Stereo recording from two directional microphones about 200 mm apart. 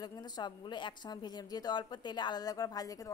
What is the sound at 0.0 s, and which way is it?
A woman's voice, 20° left (ahead or behind).